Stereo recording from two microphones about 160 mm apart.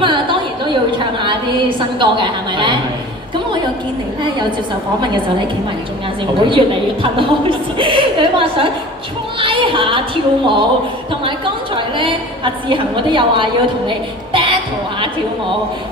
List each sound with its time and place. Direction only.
0.0 s a sound: 30° right (ahead or behind)
2.0 s a woman's voice: 30° right (ahead or behind)
6.4 s a woman's voice: 30° right (ahead or behind)